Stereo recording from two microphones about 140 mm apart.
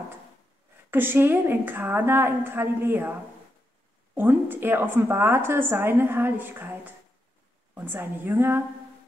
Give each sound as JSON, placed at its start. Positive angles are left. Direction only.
{"t": 0.8, "sound": "a woman's voice", "side_deg": -15}
{"t": 4.1, "sound": "a woman's voice", "side_deg": -15}